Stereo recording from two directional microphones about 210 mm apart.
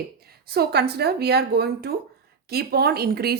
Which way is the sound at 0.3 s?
50° right (ahead or behind).